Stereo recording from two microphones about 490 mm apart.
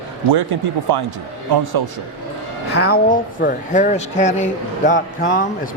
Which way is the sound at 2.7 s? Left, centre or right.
Centre.